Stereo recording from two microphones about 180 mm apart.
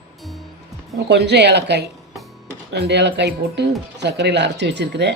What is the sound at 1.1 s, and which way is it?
Speech, 70° right (ahead or behind).